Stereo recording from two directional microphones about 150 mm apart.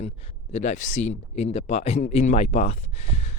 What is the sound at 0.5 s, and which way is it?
Speech, 50° left (ahead or behind).